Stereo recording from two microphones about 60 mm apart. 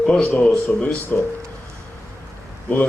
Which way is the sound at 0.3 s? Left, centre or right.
Left.